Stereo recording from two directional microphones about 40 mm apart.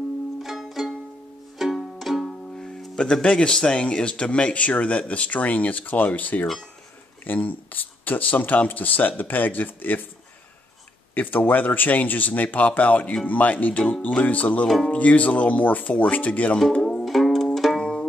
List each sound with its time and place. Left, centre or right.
0.4 s music: centre
3.0 s speech: left
11.1 s speech: left
17.0 s music: centre
17.7 s music: centre